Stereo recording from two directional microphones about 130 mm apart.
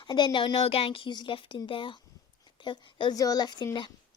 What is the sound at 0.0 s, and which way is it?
A woman's voice, 35° left (ahead or behind).